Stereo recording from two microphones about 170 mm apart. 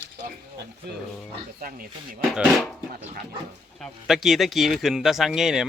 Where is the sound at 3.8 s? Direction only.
Centre (ahead or behind).